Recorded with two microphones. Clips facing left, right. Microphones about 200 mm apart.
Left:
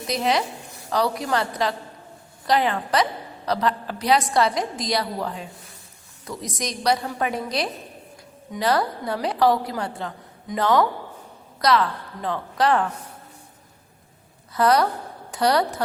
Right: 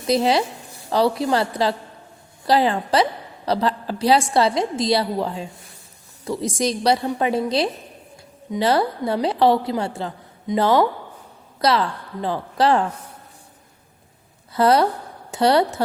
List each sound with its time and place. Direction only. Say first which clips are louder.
0.1 s a woman's voice: right 5 dB; 30° right (ahead or behind)
14.5 s a woman's voice: right 3 dB; 30° right (ahead or behind)